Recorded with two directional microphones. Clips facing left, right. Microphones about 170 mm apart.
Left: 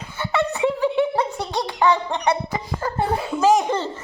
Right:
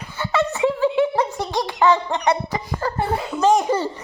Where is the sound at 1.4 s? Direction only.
15° left (ahead or behind).